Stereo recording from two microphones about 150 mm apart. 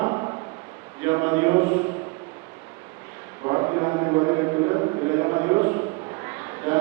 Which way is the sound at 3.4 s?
25° right (ahead or behind).